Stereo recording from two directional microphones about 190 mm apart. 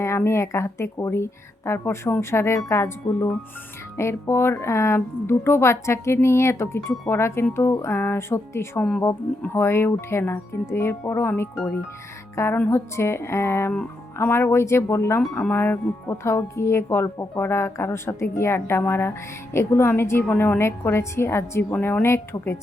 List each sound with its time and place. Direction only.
0.0 s speech: 15° left (ahead or behind)